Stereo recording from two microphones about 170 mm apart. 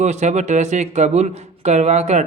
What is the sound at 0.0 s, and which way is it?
Speech, 40° right (ahead or behind).